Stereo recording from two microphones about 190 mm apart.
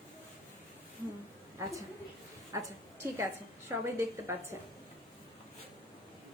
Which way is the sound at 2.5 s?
15° right (ahead or behind).